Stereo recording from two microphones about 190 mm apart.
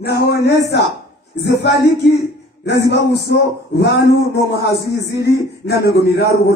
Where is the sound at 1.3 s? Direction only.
60° left (ahead or behind).